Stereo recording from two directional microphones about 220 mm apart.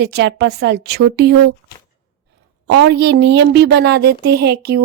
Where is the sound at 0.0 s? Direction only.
50° right (ahead or behind).